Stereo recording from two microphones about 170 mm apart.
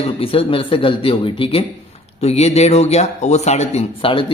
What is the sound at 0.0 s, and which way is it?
A man's voice, 35° left (ahead or behind).